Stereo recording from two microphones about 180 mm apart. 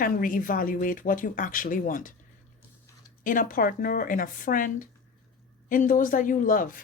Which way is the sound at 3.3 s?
50° left (ahead or behind).